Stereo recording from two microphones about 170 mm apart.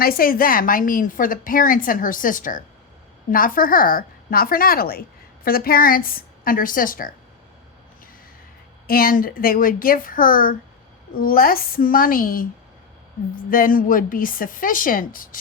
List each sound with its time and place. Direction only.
0.0 s a woman's voice: 60° left (ahead or behind)
8.9 s speech: 60° left (ahead or behind)
13.5 s a woman's voice: 55° left (ahead or behind)